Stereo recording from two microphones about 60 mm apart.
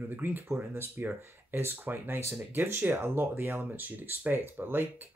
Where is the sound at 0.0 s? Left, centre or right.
Right.